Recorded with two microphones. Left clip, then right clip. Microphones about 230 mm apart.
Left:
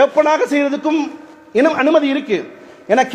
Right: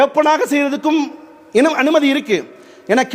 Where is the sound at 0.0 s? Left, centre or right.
Right.